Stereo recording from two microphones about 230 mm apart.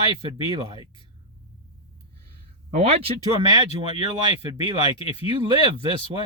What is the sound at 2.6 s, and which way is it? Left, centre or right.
Speech, right.